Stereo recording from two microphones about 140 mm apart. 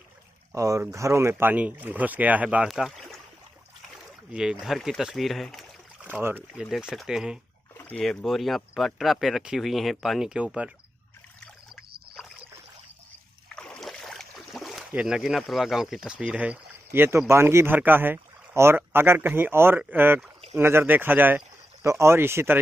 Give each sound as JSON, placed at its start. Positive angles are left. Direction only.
{"t": 0.6, "sound": "speech", "side_deg": -20}
{"t": 6.0, "sound": "speech", "side_deg": -15}
{"t": 7.7, "sound": "rowboat", "side_deg": 15}
{"t": 8.0, "sound": "speech", "side_deg": 0}
{"t": 13.6, "sound": "boat", "side_deg": 5}
{"t": 17.3, "sound": "speech", "side_deg": -20}